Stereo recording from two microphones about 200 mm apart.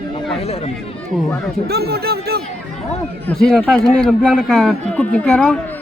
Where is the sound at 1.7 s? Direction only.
50° right (ahead or behind).